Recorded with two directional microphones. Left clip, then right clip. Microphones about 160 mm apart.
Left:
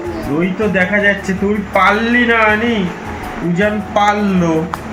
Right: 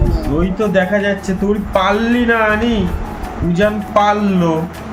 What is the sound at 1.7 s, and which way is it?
Speech, 50° right (ahead or behind).